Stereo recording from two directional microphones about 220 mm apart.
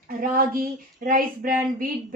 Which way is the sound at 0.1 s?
40° right (ahead or behind).